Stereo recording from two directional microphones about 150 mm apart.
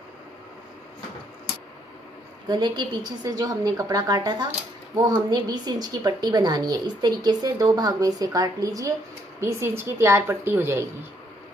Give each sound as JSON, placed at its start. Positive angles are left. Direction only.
{"t": 2.4, "sound": "a woman's voice", "side_deg": -30}